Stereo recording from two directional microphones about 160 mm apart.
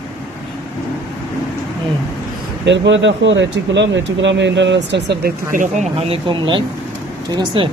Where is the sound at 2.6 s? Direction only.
90° right.